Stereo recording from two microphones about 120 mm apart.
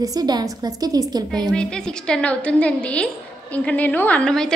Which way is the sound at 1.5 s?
5° left (ahead or behind).